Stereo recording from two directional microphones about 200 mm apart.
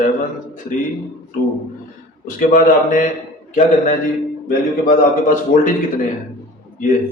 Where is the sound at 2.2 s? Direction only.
40° left (ahead or behind).